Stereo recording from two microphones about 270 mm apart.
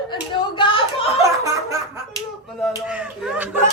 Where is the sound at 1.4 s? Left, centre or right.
Centre.